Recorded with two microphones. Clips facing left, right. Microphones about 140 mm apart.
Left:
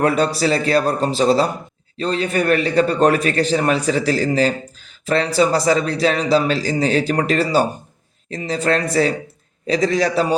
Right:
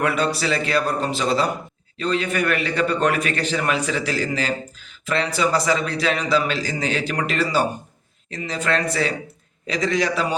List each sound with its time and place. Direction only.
0.0 s a man's voice: 35° left (ahead or behind)